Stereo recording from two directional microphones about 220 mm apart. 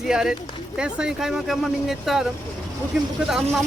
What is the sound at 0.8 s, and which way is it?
Speech, 5° right (ahead or behind).